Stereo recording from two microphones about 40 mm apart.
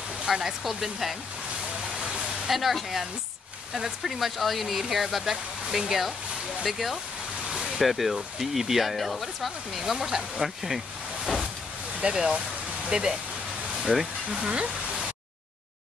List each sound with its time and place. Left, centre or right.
0.3 s speech: centre
2.0 s a sound: centre
4.0 s speech: centre
12.0 s speech: centre